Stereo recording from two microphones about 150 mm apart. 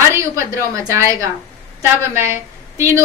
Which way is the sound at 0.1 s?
20° right (ahead or behind).